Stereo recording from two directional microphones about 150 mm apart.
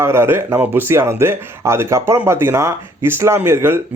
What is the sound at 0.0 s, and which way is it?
Speech, 15° right (ahead or behind).